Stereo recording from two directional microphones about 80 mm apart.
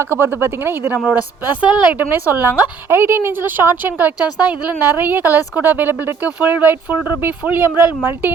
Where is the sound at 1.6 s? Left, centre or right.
Centre.